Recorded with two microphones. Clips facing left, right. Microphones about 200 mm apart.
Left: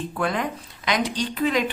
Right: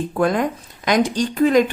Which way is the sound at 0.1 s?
45° right (ahead or behind).